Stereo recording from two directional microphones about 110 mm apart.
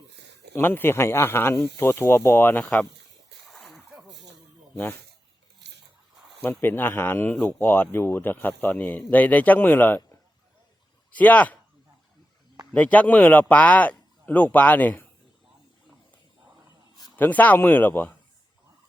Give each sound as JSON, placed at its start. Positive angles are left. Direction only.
{"t": 0.5, "sound": "speech", "side_deg": 20}
{"t": 3.5, "sound": "splash", "side_deg": 0}
{"t": 6.6, "sound": "speech", "side_deg": 20}
{"t": 11.1, "sound": "speech", "side_deg": 15}
{"t": 12.7, "sound": "speech", "side_deg": 15}
{"t": 17.2, "sound": "speech", "side_deg": 15}